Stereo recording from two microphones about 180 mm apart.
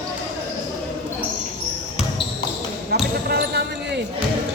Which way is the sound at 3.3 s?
65° right (ahead or behind).